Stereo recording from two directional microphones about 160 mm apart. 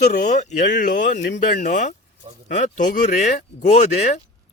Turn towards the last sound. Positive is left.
turn(degrees=45)  # may be behind; listen again after turning